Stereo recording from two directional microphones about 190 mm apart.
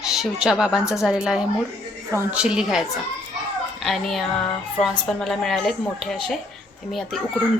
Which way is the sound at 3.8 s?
Centre (ahead or behind).